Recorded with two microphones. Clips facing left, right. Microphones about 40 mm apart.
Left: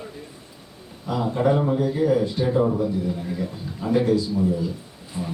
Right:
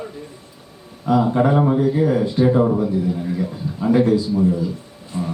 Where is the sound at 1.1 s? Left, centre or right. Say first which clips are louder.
Right 5 dB; right.